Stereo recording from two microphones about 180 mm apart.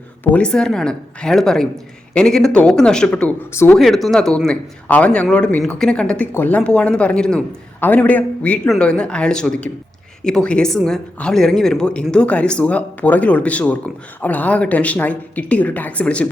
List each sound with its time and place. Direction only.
0.3 s speech: 5° left (ahead or behind)
3.8 s speech: centre (ahead or behind)